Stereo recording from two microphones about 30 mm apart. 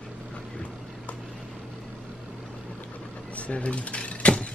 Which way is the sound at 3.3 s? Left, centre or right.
Left.